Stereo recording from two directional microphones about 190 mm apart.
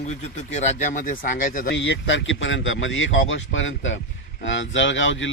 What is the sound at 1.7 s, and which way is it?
Speech, 70° left (ahead or behind).